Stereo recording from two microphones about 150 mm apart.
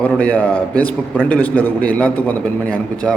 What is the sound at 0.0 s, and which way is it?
A man's voice, 10° left (ahead or behind).